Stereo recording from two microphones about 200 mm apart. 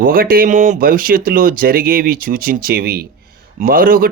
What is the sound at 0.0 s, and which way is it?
Speech, 45° right (ahead or behind).